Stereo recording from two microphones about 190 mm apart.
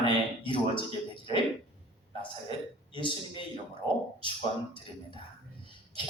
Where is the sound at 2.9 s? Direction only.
25° left (ahead or behind).